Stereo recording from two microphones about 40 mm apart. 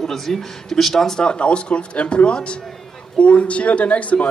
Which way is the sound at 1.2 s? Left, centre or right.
Left.